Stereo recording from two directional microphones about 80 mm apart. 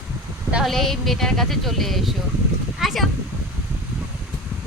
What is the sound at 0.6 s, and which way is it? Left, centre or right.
Speech, centre.